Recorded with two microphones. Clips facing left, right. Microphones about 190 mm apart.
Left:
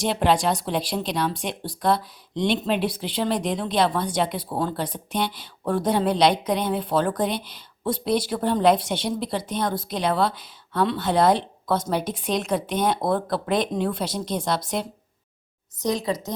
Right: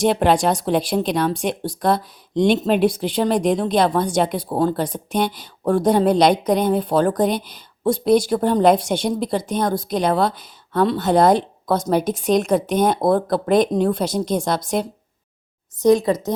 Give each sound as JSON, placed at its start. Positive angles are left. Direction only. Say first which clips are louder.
{"t": 0.0, "sound": "speech", "louder": "right 5 dB", "side_deg": -50}